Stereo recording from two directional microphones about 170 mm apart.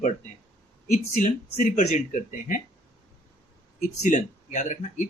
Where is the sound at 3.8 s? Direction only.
45° left (ahead or behind).